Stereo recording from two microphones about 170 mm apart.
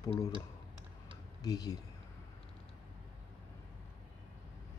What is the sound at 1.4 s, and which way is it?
Speech, 20° left (ahead or behind).